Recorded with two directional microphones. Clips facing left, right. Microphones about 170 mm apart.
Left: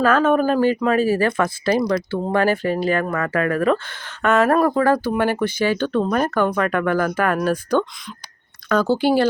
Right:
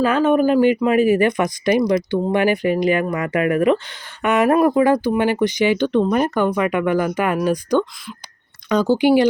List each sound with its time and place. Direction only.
0.0 s speech: 15° right (ahead or behind)